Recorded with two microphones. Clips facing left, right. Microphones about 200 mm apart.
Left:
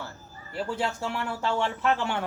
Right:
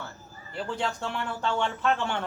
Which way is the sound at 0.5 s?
5° left (ahead or behind).